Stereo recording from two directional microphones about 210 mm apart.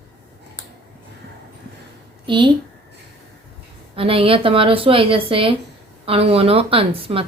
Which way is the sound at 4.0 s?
25° right (ahead or behind).